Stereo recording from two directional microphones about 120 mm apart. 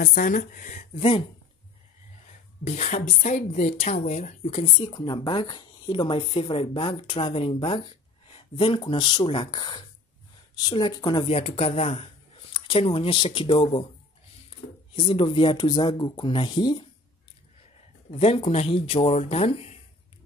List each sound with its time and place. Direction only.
0.3 s speech: 90° left
0.9 s a woman's voice: 50° left (ahead or behind)
2.6 s a woman's voice: 70° left (ahead or behind)
4.6 s a woman's voice: 45° left (ahead or behind)
11.2 s a woman's voice: 55° left (ahead or behind)
15.0 s a woman's voice: 45° left (ahead or behind)
18.2 s speech: 55° left (ahead or behind)